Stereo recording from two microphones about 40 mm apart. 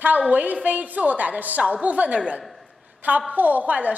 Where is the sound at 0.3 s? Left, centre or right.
Right.